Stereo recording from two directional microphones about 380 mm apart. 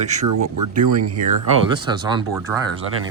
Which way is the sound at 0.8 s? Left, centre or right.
Right.